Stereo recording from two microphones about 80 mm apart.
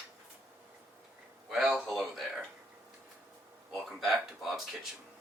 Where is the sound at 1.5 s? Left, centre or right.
Centre.